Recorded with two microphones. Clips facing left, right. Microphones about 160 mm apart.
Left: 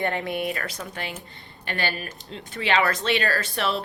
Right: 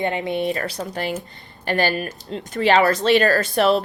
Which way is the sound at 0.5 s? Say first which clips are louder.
Right 7 dB; 35° right (ahead or behind).